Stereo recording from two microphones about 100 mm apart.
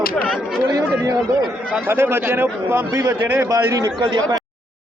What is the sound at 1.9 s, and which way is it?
A man's voice, 25° right (ahead or behind).